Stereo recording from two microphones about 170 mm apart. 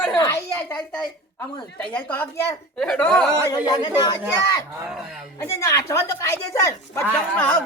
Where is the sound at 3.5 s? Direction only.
25° left (ahead or behind).